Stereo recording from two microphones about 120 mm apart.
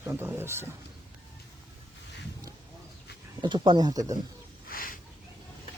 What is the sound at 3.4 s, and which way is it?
Speech, 40° right (ahead or behind).